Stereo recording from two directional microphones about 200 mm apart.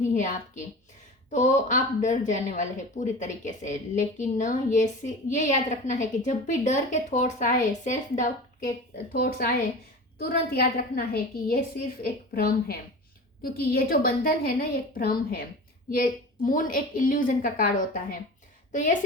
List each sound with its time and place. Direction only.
0.0 s a woman's voice: 35° left (ahead or behind)
9.1 s a woman's voice: 50° left (ahead or behind)